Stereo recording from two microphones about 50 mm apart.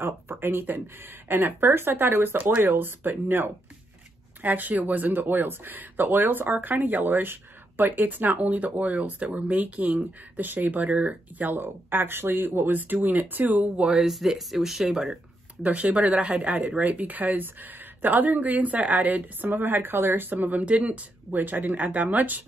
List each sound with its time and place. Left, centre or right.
0.0 s speech: right
4.4 s speech: right
11.6 s speech: right
13.9 s speech: centre
15.6 s speech: right